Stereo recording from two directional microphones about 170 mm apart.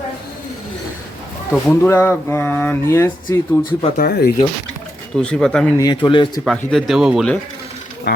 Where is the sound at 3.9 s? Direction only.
60° left (ahead or behind).